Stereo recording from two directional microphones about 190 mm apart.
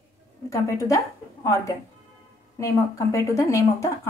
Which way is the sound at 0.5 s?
15° left (ahead or behind).